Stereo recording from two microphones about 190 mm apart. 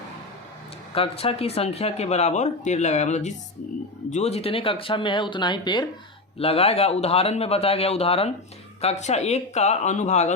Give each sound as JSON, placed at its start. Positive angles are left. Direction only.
{"t": 0.9, "sound": "speech", "side_deg": 30}